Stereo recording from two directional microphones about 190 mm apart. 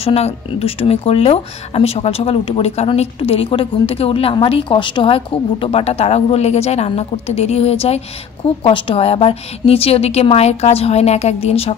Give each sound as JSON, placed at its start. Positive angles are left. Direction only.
{"t": 0.0, "sound": "speech", "side_deg": 30}